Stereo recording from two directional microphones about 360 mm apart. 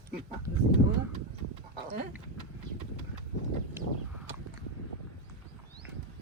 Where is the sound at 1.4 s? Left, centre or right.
Right.